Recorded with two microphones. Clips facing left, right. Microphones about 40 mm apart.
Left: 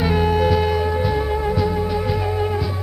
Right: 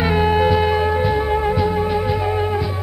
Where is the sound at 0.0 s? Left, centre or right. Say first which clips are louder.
Right 2 dB; right.